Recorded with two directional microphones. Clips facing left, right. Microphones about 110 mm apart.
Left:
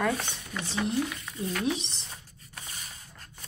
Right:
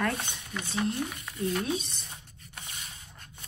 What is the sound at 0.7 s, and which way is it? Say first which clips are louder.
Speech: left 2 dB; 90° left.